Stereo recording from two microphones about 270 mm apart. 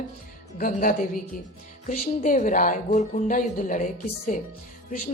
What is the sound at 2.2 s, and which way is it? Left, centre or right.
A woman's voice, left.